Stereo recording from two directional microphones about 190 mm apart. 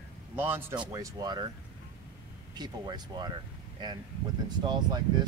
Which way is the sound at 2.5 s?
20° right (ahead or behind).